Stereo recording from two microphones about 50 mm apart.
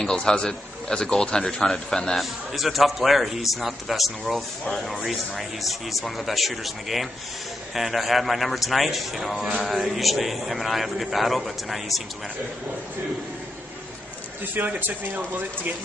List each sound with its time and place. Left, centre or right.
0.0 s a man's voice: centre
2.1 s a man's voice: centre
14.4 s speech: right